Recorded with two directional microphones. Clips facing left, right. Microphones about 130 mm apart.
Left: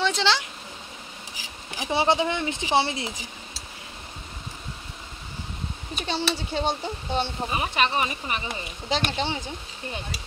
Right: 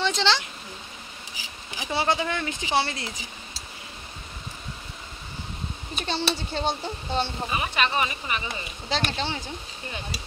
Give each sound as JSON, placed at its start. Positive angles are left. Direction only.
{"t": 0.0, "sound": "speech", "side_deg": 5}
{"t": 1.8, "sound": "speech", "side_deg": 25}
{"t": 5.9, "sound": "speech", "side_deg": 10}
{"t": 7.5, "sound": "speech", "side_deg": 30}
{"t": 8.8, "sound": "speech", "side_deg": 15}